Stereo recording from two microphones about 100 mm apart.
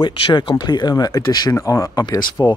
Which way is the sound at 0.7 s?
45° left (ahead or behind).